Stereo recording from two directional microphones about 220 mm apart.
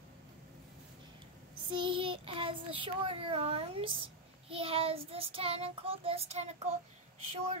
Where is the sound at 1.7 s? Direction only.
20° right (ahead or behind).